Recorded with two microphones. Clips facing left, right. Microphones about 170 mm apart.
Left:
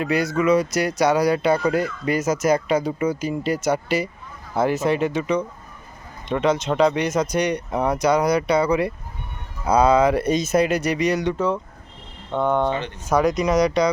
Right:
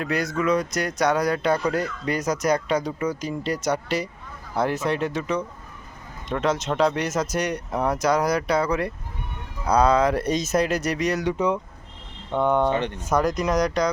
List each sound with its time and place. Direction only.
0.0 s speech: centre (ahead or behind)
11.3 s speech: 15° right (ahead or behind)
12.3 s speech: centre (ahead or behind)